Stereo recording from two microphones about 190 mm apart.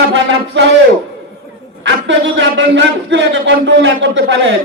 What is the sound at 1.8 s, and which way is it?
A man's voice, 70° right (ahead or behind).